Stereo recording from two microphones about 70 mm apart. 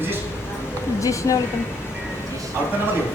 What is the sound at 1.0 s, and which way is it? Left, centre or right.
Speech, left.